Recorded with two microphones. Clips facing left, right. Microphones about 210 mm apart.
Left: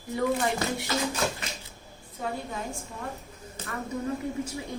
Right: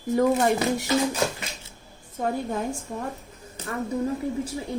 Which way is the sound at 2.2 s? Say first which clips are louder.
Right 7 dB; 50° right (ahead or behind).